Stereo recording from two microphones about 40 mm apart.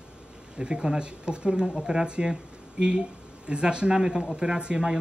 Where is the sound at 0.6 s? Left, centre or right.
Right.